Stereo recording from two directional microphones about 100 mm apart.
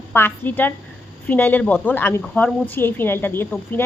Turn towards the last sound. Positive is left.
turn(degrees=20)  # may be behind; listen again after turning